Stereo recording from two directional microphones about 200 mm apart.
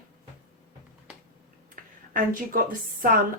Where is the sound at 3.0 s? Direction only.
45° right (ahead or behind).